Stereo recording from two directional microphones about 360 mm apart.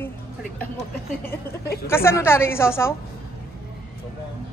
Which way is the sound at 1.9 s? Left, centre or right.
Centre.